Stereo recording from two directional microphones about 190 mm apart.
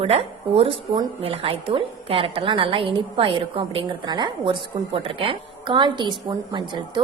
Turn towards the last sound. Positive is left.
turn(degrees=-25)  # may be behind; listen again after turning